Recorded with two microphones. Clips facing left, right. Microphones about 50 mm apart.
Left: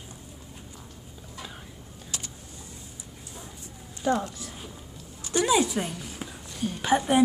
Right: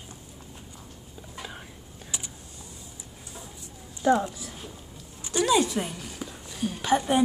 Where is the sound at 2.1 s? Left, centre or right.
Centre.